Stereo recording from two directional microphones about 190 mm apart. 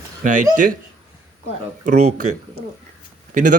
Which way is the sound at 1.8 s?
35° right (ahead or behind).